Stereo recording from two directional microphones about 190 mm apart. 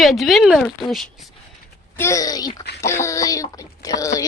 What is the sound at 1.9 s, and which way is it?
Speech, 15° left (ahead or behind).